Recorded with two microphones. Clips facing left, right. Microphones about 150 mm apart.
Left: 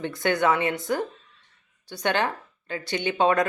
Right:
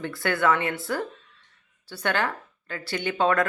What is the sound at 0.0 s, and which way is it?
A woman's voice, 20° left (ahead or behind).